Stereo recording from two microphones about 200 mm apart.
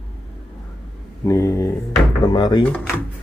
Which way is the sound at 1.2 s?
15° left (ahead or behind).